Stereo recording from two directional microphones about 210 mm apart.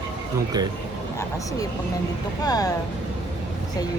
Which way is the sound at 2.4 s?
20° left (ahead or behind).